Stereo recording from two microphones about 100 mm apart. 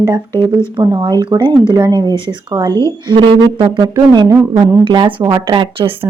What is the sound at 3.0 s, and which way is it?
Speech, 50° right (ahead or behind).